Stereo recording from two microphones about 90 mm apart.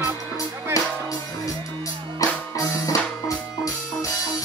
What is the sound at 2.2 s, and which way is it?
Music, 40° left (ahead or behind).